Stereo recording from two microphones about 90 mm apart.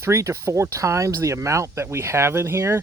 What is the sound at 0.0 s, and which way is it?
Speech, 35° right (ahead or behind).